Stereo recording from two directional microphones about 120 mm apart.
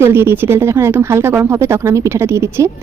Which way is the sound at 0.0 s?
20° right (ahead or behind).